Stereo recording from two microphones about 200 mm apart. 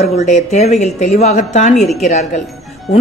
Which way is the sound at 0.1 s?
35° left (ahead or behind).